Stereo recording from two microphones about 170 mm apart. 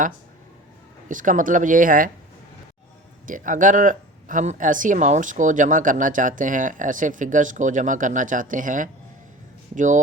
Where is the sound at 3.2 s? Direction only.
50° right (ahead or behind).